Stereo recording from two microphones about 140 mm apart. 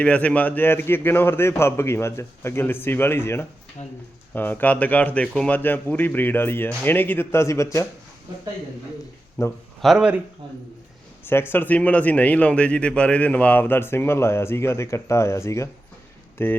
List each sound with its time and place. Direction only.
0.0 s speech: 10° left (ahead or behind)
9.4 s speech: 20° left (ahead or behind)
9.8 s speech: 5° right (ahead or behind)
11.3 s speech: 15° left (ahead or behind)